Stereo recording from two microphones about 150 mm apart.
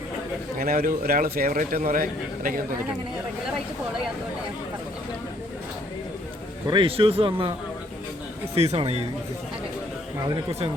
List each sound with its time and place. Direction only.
0.6 s a man's voice: 80° right
6.7 s speech: 35° right (ahead or behind)
8.5 s speech: 45° right (ahead or behind)